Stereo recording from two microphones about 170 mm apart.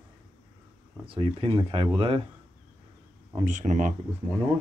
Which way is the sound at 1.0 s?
30° right (ahead or behind).